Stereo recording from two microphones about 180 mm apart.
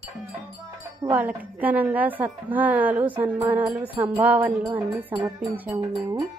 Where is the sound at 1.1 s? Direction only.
10° right (ahead or behind).